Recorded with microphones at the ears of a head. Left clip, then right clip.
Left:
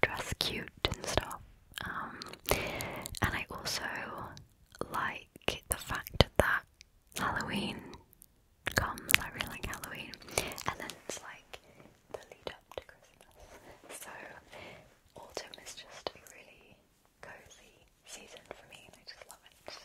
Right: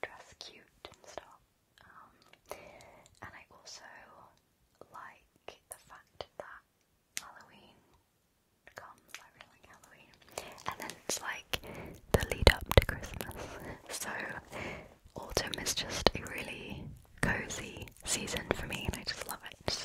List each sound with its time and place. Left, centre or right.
0.0 s whispering: left
11.1 s whispering: right